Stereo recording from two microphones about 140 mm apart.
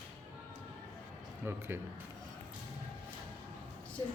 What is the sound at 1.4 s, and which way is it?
Speech, 15° right (ahead or behind).